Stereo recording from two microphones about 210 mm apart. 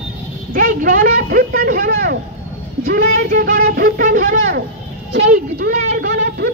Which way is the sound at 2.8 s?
45° right (ahead or behind).